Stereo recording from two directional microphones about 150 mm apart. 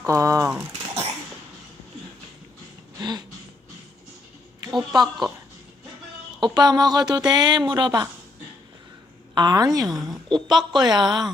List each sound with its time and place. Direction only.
0.0 s speech: 20° right (ahead or behind)
3.0 s speech: 25° right (ahead or behind)
4.9 s speech: 25° right (ahead or behind)
6.4 s speech: 25° right (ahead or behind)
9.3 s speech: 30° right (ahead or behind)
9.8 s a woman's voice: centre (ahead or behind)
10.5 s speech: 30° right (ahead or behind)